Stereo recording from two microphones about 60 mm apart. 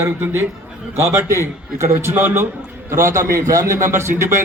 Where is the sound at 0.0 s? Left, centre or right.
Right.